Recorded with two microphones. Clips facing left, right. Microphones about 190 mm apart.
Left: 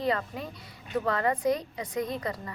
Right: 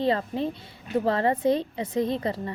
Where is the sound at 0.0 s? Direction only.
30° right (ahead or behind).